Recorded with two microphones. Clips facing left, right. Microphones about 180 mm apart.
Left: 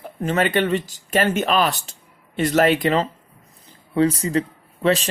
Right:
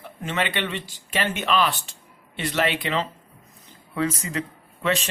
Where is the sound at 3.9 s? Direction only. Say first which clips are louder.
Left 7 dB; 35° left (ahead or behind).